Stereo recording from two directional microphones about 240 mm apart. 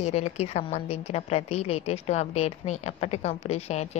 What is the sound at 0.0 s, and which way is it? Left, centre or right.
Speech, left.